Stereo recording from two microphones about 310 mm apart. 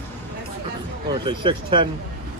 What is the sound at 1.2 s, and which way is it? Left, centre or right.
Speech, centre.